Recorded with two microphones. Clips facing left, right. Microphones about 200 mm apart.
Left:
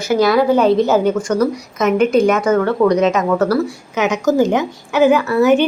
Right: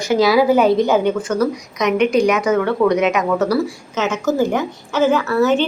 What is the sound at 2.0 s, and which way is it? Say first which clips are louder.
A woman's voice: left 2 dB; centre (ahead or behind).